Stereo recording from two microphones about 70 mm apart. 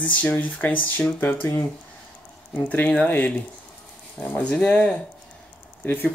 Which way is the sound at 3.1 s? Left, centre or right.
Left.